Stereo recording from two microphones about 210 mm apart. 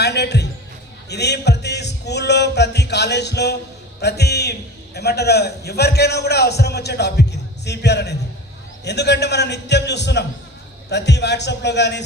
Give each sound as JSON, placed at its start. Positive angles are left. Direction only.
{"t": 0.0, "sound": "music", "side_deg": 50}
{"t": 1.1, "sound": "a man's voice", "side_deg": 50}